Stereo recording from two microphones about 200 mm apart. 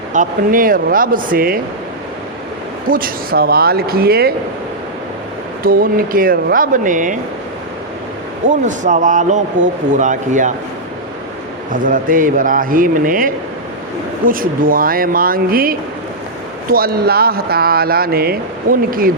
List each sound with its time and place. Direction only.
0.1 s speech: 40° right (ahead or behind)
2.9 s speech: 45° right (ahead or behind)
5.6 s speech: 45° right (ahead or behind)
8.4 s a man's voice: 40° right (ahead or behind)
11.7 s speech: 45° right (ahead or behind)